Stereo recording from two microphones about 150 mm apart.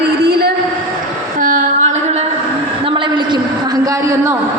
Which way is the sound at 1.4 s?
60° right (ahead or behind).